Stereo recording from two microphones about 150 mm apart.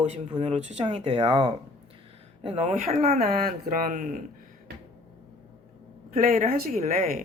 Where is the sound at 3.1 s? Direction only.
75° right (ahead or behind).